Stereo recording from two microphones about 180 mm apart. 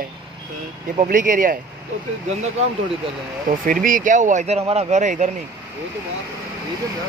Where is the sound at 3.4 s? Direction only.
50° right (ahead or behind).